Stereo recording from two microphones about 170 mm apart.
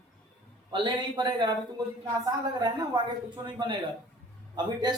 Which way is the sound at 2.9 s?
25° right (ahead or behind).